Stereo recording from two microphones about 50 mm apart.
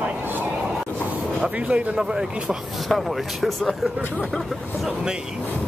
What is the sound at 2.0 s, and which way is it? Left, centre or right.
Speech, centre.